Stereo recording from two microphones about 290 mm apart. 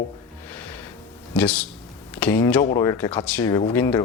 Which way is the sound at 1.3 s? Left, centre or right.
Centre.